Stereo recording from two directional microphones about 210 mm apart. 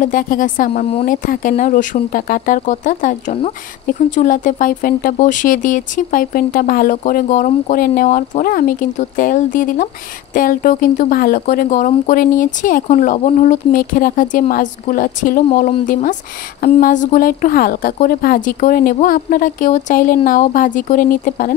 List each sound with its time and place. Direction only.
0.0 s speech: 40° left (ahead or behind)